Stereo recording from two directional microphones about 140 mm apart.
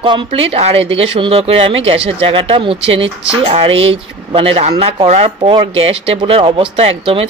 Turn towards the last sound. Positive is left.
turn(degrees=-45)  # may be behind; listen again after turning